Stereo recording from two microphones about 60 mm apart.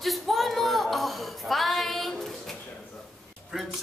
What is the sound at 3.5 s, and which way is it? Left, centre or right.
Speech, centre.